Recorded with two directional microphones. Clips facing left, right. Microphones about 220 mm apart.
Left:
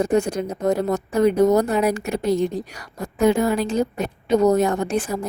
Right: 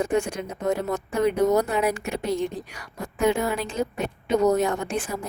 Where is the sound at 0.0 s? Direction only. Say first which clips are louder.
Left 5 dB; 40° left (ahead or behind).